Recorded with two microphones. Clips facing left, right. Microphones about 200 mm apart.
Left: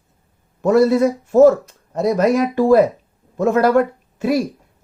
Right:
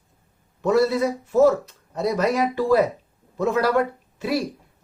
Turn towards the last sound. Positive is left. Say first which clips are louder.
# left 6 dB
turn(degrees=45)  # may be behind; listen again after turning